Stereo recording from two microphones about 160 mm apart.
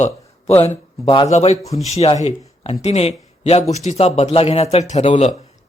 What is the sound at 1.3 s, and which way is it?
A man's voice, 45° left (ahead or behind).